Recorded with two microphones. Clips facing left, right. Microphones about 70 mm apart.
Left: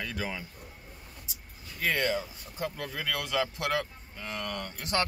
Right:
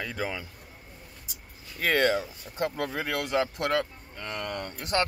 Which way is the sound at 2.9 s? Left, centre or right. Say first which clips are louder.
Right 4 dB; right.